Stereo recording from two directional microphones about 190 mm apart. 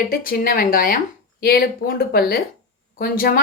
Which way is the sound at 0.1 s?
50° left (ahead or behind).